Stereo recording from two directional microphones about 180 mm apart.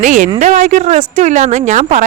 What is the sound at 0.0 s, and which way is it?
Speech, 45° right (ahead or behind).